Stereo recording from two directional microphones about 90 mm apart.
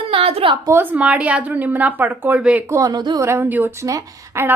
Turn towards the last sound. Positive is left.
turn(degrees=-30)  # may be behind; listen again after turning